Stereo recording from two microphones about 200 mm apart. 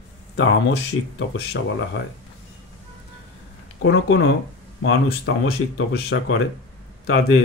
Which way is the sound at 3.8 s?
70° left (ahead or behind).